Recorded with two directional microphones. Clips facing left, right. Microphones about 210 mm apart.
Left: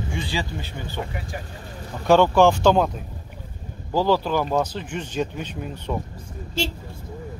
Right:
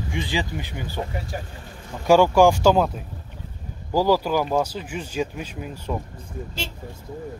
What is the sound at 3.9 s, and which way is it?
Speech, 10° right (ahead or behind).